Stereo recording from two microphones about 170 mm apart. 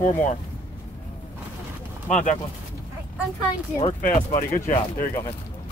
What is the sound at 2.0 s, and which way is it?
Speech, 50° left (ahead or behind).